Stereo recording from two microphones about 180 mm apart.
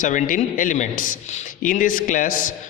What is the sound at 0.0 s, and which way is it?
A man's voice, 45° left (ahead or behind).